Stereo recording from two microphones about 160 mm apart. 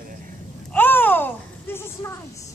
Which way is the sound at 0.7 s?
10° left (ahead or behind).